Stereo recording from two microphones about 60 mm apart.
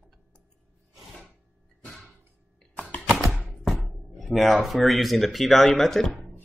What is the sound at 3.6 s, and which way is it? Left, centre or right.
Speech, centre.